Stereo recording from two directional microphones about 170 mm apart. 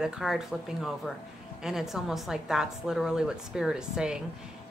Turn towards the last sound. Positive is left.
turn(degrees=-5)  # may be behind; listen again after turning